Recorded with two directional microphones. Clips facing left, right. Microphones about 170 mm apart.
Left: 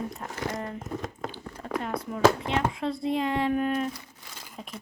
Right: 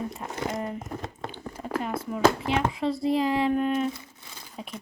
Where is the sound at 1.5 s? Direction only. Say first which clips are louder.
Right 2 dB; 5° right (ahead or behind).